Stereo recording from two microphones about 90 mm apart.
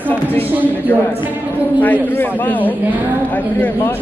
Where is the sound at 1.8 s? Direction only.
20° left (ahead or behind).